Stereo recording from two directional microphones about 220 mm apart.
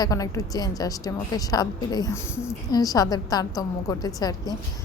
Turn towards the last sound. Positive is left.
turn(degrees=15)  # may be behind; listen again after turning